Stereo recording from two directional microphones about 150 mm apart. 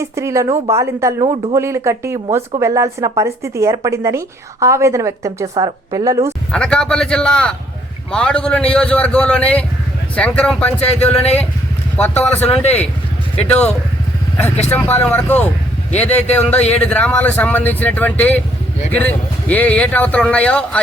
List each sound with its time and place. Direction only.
0.0 s a woman's voice: 20° right (ahead or behind)
6.5 s a man's voice: 5° left (ahead or behind)
10.9 s speech: 45° left (ahead or behind)
11.9 s speech: 10° left (ahead or behind)
12.4 s speech: 45° left (ahead or behind)
13.3 s speech: 10° left (ahead or behind)
14.7 s speech: 10° left (ahead or behind)
16.5 s speech: 10° left (ahead or behind)